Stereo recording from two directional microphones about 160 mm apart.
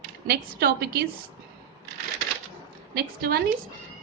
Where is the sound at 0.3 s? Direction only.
80° right.